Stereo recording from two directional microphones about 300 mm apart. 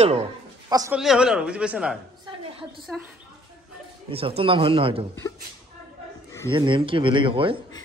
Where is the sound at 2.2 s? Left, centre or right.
Centre.